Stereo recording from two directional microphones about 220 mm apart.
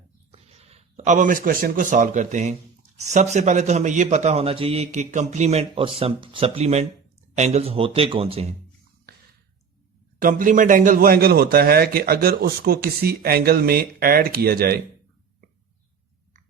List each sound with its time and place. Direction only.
0.3 s a man's voice: 30° right (ahead or behind)
10.2 s a man's voice: 40° right (ahead or behind)